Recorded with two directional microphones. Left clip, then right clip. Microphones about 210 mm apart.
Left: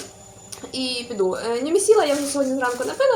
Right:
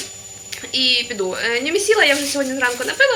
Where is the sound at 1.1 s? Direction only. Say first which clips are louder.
Left 1 dB; 15° right (ahead or behind).